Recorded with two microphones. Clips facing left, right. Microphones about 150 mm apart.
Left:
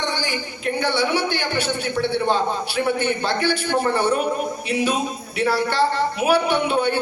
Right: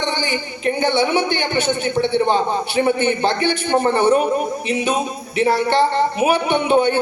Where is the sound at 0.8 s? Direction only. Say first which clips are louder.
Right 3 dB; 20° right (ahead or behind).